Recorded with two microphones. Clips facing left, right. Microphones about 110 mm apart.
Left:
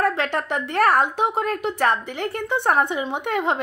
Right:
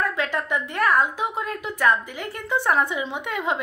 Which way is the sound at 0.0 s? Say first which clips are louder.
Left 3 dB; 65° left (ahead or behind).